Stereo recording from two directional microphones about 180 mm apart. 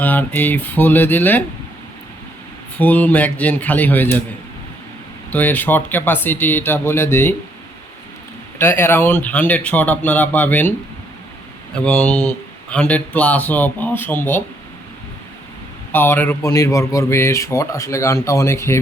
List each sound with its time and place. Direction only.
0.0 s speech: 10° left (ahead or behind)
2.7 s speech: 10° left (ahead or behind)
5.3 s speech: 10° left (ahead or behind)
8.5 s speech: 15° left (ahead or behind)
15.9 s speech: 10° left (ahead or behind)